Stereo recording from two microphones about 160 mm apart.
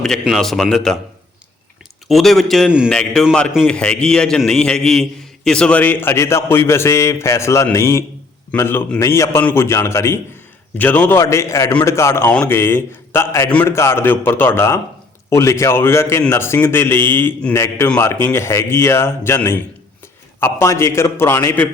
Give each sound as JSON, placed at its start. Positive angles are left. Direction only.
{"t": 0.0, "sound": "a man's voice", "side_deg": 5}
{"t": 2.0, "sound": "a man's voice", "side_deg": 0}